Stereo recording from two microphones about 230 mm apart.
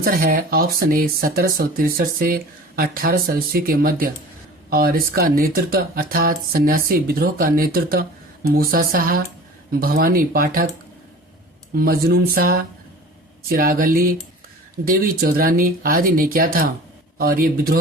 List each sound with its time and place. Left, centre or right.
0.0 s speech: right
11.7 s speech: right